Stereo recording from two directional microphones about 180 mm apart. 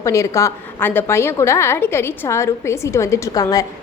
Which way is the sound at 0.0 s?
15° left (ahead or behind).